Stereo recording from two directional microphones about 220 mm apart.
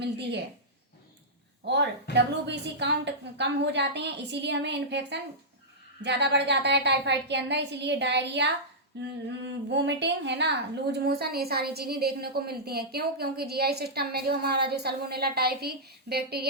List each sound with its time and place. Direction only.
0.0 s a woman's voice: 50° right (ahead or behind)
1.6 s a woman's voice: 50° right (ahead or behind)